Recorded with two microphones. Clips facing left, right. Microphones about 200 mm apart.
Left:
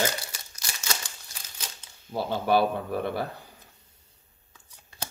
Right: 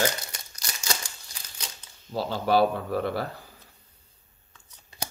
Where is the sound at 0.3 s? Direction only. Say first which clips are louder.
Right 1 dB; 5° left (ahead or behind).